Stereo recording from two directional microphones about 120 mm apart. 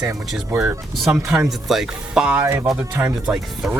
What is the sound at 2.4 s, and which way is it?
Speech, 20° right (ahead or behind).